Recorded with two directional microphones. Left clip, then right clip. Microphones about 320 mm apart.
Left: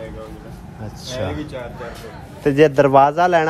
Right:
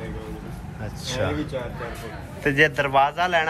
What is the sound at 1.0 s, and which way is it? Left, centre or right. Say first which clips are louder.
Speech: left 1 dB; centre.